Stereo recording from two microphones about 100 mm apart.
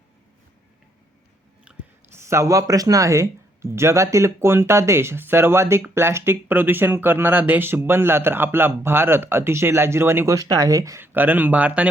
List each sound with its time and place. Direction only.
1.7 s a sound: 10° right (ahead or behind)
2.1 s speech: 30° right (ahead or behind)
11.0 s speech: 20° right (ahead or behind)